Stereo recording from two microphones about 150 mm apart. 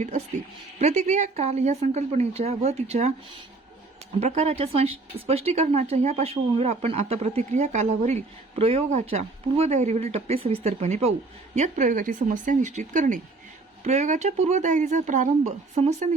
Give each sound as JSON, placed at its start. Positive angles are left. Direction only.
{"t": 0.8, "sound": "a woman's voice", "side_deg": -50}
{"t": 4.2, "sound": "a woman's voice", "side_deg": -45}
{"t": 13.8, "sound": "a woman's voice", "side_deg": -50}